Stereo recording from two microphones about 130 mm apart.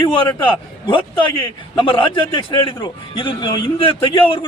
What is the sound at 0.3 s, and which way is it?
A man's voice, 40° left (ahead or behind).